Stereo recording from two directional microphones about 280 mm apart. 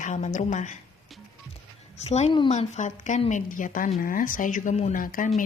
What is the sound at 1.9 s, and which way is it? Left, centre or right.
A woman's voice, left.